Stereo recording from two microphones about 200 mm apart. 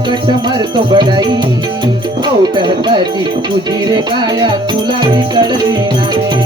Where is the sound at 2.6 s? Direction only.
20° right (ahead or behind).